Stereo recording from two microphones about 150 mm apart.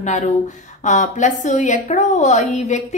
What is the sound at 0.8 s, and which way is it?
A woman's voice, 55° left (ahead or behind).